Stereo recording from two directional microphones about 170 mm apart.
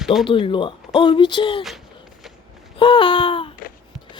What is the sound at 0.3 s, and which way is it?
Speech, 30° left (ahead or behind).